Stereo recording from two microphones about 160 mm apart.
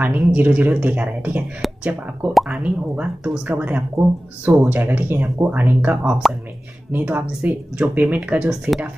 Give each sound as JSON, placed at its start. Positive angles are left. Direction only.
{"t": 0.2, "sound": "speech", "side_deg": -10}